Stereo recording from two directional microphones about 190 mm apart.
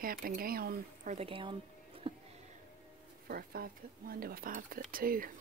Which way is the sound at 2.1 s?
30° right (ahead or behind).